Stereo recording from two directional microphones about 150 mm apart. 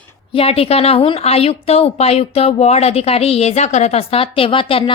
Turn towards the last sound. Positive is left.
turn(degrees=35)  # may be behind; listen again after turning